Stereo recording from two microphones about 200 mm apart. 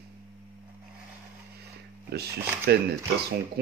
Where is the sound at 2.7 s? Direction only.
55° right (ahead or behind).